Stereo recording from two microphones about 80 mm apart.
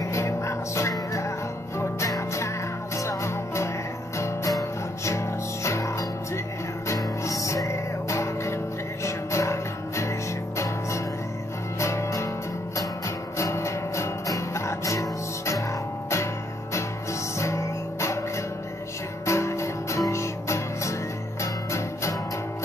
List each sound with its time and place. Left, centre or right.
0.0 s music: left
11.8 s music: left
13.4 s music: left
17.4 s music: left